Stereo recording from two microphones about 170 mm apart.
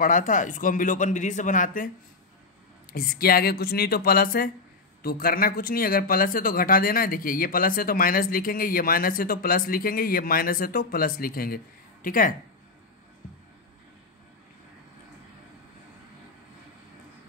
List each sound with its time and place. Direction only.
0.0 s a man's voice: 50° left (ahead or behind)
2.9 s speech: 60° left (ahead or behind)